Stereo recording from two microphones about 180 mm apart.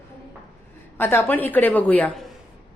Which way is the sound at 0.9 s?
10° left (ahead or behind).